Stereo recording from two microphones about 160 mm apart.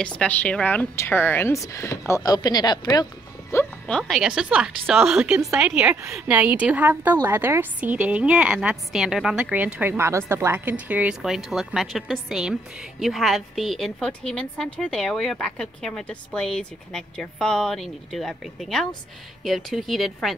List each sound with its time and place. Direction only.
0.0 s a woman's voice: 5° left (ahead or behind); by 3.1 s 25° left (ahead or behind)
3.8 s a woman's voice: centre (ahead or behind)